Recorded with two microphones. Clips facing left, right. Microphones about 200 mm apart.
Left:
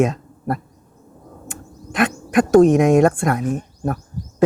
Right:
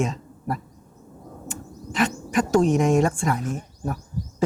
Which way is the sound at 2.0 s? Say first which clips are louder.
Left 5 dB; 60° left (ahead or behind).